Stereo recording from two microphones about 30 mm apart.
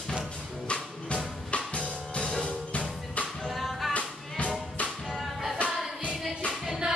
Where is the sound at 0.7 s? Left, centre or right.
Left.